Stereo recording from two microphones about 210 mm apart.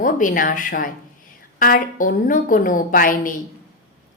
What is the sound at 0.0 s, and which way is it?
A woman's voice, 40° left (ahead or behind).